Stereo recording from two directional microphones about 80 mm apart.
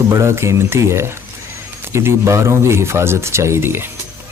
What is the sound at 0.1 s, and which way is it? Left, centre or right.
Speech, right.